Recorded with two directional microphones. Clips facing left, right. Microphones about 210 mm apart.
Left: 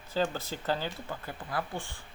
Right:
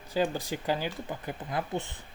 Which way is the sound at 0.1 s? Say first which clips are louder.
Right 2 dB; 15° right (ahead or behind).